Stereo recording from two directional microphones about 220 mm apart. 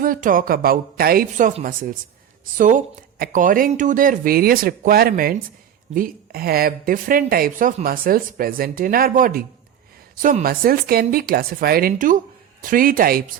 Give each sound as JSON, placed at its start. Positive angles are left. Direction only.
{"t": 0.0, "sound": "speech", "side_deg": -40}